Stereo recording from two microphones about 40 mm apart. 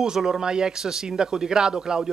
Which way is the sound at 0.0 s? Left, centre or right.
Centre.